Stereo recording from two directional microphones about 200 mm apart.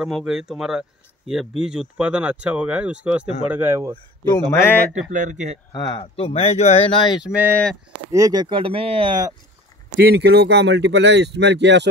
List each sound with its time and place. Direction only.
0.0 s speech: centre (ahead or behind)
4.2 s speech: 15° left (ahead or behind)
5.1 s speech: 40° right (ahead or behind)
5.7 s speech: 20° left (ahead or behind)
8.1 s speech: 20° right (ahead or behind)
9.9 s speech: 55° right (ahead or behind)